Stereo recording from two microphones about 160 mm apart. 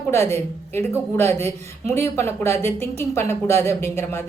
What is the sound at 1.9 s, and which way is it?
Speech, 15° left (ahead or behind).